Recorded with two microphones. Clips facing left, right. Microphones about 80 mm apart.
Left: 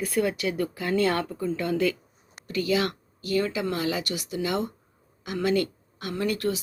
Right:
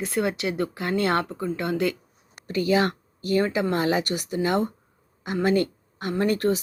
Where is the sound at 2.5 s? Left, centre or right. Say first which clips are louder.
Right 3 dB; right.